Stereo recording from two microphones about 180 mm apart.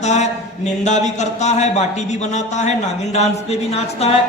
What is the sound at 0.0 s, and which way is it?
A man's voice, 40° left (ahead or behind).